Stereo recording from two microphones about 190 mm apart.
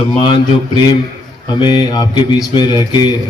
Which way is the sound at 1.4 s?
20° left (ahead or behind).